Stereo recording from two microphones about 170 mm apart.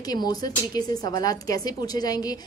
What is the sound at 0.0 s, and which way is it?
Speech, 20° left (ahead or behind).